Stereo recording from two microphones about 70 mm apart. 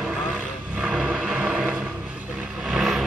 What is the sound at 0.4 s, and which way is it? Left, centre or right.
Vehicle, centre.